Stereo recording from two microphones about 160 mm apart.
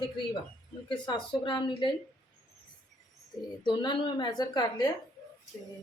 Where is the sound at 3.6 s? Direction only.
25° left (ahead or behind).